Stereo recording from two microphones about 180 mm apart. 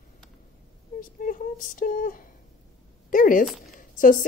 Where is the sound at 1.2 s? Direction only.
50° left (ahead or behind).